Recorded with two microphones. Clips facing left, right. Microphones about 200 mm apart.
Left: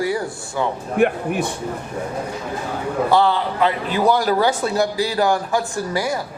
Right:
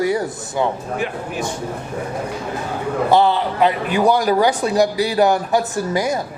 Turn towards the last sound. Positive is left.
turn(degrees=-20)  # may be behind; listen again after turning